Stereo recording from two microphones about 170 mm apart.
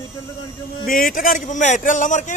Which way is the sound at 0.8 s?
55° left (ahead or behind).